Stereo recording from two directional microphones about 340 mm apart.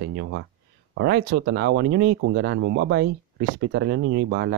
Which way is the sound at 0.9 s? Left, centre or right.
Right.